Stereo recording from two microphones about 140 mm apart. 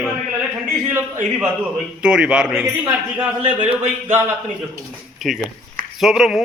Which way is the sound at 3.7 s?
15° right (ahead or behind).